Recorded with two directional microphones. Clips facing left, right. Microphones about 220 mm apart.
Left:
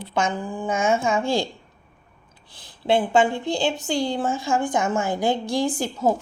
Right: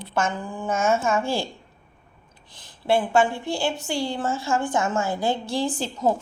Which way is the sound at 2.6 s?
20° left (ahead or behind).